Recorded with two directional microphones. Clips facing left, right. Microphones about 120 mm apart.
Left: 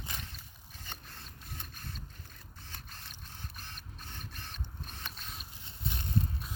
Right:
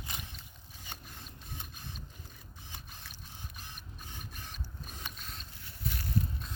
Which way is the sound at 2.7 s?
15° right (ahead or behind).